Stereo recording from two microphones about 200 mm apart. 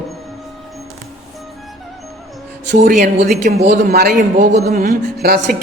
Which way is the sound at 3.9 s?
50° right (ahead or behind).